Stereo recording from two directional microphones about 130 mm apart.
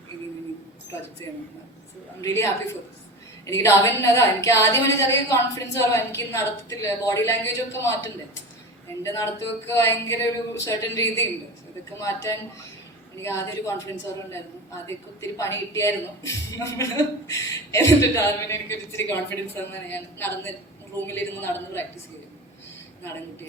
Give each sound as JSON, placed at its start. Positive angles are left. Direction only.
{"t": 2.2, "sound": "a woman's voice", "side_deg": 20}
{"t": 9.0, "sound": "a woman's voice", "side_deg": 20}
{"t": 14.8, "sound": "a woman's voice", "side_deg": 20}